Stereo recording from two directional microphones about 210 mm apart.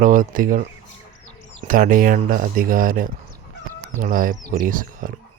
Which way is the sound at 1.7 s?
40° right (ahead or behind).